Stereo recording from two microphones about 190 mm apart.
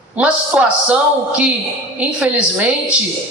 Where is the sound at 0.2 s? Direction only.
5° right (ahead or behind).